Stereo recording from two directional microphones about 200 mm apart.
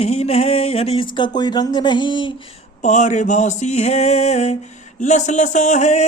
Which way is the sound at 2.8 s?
35° left (ahead or behind).